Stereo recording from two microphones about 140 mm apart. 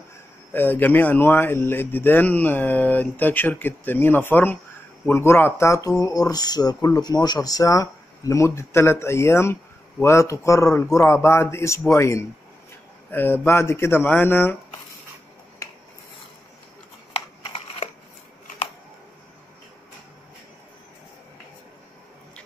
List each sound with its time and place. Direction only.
0.5 s speech: 15° left (ahead or behind)